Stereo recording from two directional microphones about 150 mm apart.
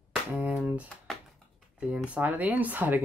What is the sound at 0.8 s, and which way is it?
Typewriter, centre (ahead or behind).